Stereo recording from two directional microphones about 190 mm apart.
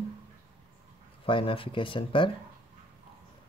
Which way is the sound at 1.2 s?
25° left (ahead or behind).